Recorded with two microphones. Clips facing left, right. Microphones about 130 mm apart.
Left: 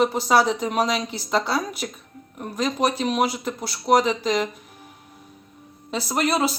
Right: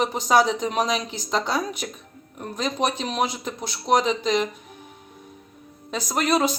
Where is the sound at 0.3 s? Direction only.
5° left (ahead or behind).